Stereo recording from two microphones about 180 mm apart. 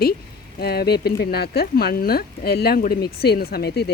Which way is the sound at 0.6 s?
60° left (ahead or behind).